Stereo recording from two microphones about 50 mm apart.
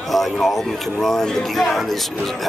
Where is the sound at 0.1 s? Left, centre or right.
Centre.